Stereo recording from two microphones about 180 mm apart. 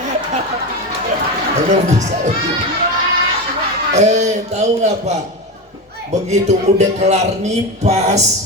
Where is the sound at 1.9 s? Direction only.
40° right (ahead or behind).